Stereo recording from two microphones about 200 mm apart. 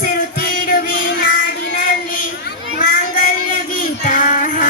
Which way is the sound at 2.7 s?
40° left (ahead or behind).